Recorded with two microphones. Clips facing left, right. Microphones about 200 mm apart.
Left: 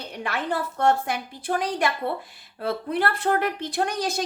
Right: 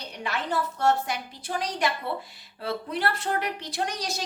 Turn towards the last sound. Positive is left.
turn(degrees=55)  # may be behind; listen again after turning